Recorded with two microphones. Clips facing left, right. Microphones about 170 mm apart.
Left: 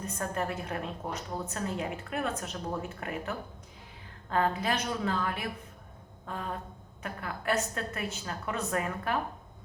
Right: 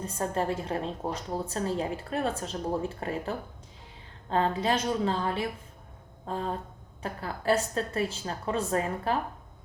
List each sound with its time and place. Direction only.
0.0 s a woman's voice: 30° right (ahead or behind)